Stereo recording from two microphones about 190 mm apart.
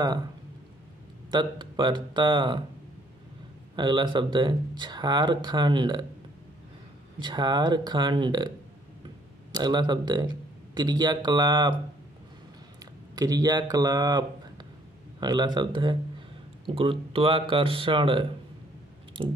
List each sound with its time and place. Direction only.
1.3 s speech: 25° right (ahead or behind)
3.7 s speech: 25° right (ahead or behind)
7.2 s a man's voice: 25° right (ahead or behind)
13.1 s speech: 20° right (ahead or behind)